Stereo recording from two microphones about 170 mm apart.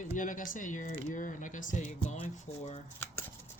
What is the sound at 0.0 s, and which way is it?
Speech, 50° left (ahead or behind).